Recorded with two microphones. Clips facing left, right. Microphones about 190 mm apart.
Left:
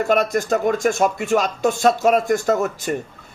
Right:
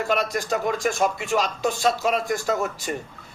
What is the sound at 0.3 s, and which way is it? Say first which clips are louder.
A man's voice: left 6 dB; 50° left (ahead or behind).